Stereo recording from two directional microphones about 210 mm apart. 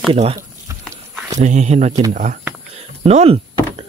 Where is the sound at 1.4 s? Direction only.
35° right (ahead or behind).